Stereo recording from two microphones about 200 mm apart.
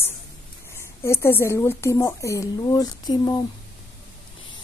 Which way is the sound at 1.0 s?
10° left (ahead or behind).